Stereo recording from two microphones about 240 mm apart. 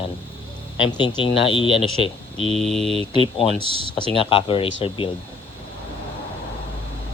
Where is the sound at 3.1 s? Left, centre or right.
Left.